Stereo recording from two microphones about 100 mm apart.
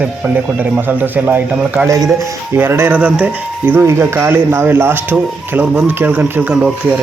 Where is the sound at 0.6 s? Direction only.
20° right (ahead or behind).